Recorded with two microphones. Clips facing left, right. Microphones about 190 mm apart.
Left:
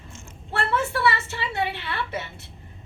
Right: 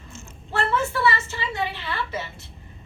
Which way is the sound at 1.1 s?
65° left (ahead or behind).